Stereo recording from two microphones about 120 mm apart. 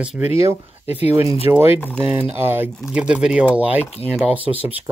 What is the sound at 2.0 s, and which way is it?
Speech, 15° right (ahead or behind).